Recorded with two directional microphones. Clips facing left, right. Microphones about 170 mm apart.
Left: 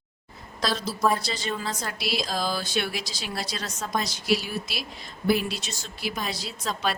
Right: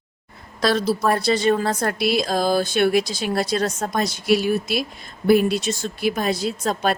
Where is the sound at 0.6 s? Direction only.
60° right (ahead or behind).